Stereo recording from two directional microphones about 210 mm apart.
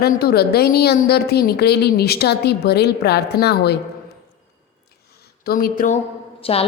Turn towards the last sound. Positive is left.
turn(degrees=25)  # may be behind; listen again after turning